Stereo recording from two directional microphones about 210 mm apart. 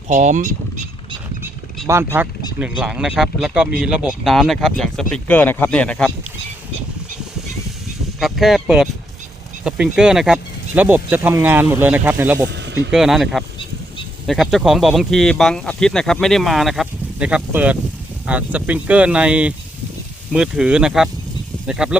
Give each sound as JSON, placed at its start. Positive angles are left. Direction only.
{"t": 0.1, "sound": "speech", "side_deg": -35}
{"t": 1.9, "sound": "speech", "side_deg": -10}
{"t": 8.2, "sound": "speech", "side_deg": 0}
{"t": 12.5, "sound": "speech", "side_deg": -55}
{"t": 12.9, "sound": "speech", "side_deg": 0}